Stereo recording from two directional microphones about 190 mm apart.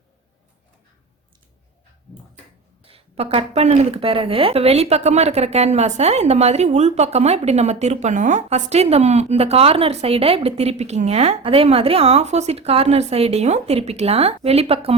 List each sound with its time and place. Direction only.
2.8 s speech: 30° right (ahead or behind)